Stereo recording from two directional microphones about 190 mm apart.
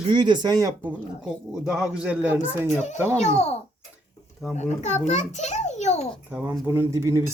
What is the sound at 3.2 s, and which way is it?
A child's voice, 35° left (ahead or behind).